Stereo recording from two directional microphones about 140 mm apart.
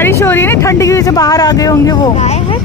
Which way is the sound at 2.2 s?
50° left (ahead or behind).